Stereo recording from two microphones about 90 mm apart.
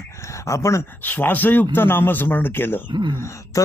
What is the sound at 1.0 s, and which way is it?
Speech, 20° left (ahead or behind).